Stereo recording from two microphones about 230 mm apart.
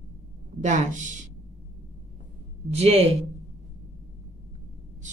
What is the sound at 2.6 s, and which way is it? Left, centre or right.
Speech, right.